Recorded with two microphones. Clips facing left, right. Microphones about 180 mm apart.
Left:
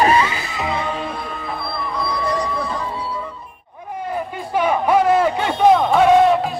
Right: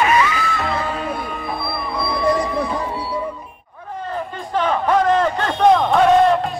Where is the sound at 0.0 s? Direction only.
30° left (ahead or behind).